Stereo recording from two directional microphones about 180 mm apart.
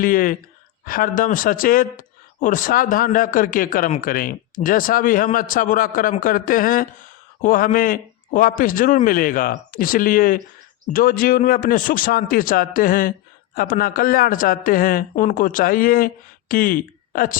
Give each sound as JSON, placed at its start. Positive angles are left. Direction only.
{"t": 0.0, "sound": "speech", "side_deg": 50}